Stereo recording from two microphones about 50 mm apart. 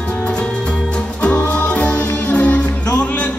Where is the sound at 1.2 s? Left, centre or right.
Left.